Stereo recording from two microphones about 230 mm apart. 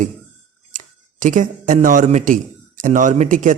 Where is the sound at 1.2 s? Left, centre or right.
Right.